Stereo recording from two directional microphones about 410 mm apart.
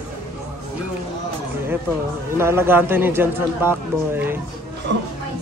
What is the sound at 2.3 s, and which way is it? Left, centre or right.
A man's voice, centre.